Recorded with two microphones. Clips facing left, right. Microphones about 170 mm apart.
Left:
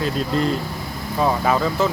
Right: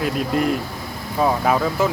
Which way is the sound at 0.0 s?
10° right (ahead or behind).